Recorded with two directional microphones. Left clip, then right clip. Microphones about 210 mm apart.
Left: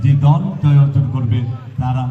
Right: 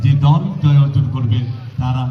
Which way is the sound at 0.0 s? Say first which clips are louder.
Even; 40° left (ahead or behind).